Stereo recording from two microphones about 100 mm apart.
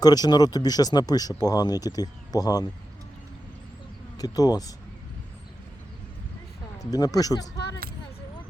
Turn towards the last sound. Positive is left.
turn(degrees=40)  # may be behind; listen again after turning